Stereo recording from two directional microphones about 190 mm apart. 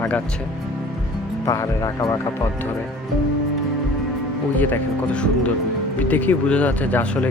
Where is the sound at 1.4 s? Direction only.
15° left (ahead or behind).